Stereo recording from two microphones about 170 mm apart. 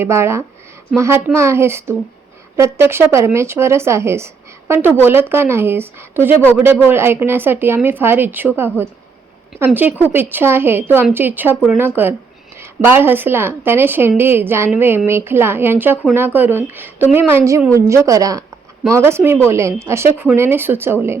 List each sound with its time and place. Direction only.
0.0 s a woman's voice: 15° right (ahead or behind)